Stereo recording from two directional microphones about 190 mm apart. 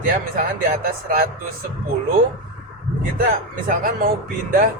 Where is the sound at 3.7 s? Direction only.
50° right (ahead or behind).